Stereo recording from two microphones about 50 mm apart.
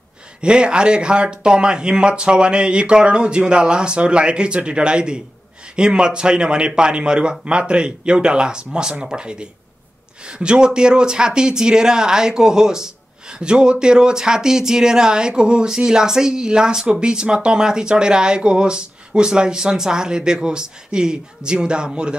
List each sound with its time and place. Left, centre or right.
0.4 s speech: centre